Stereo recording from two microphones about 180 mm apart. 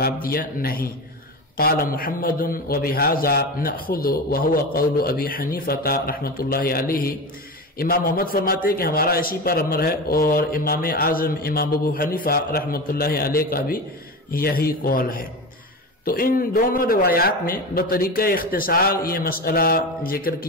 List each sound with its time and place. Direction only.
0.0 s a man's voice: 55° left (ahead or behind)